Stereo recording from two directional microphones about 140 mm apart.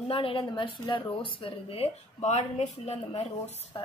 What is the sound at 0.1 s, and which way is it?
Speech, 35° left (ahead or behind).